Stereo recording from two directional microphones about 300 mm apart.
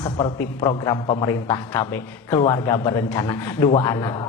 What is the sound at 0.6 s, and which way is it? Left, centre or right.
Speech, centre.